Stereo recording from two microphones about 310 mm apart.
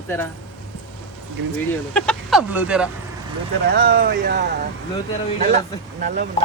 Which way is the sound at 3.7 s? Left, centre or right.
Right.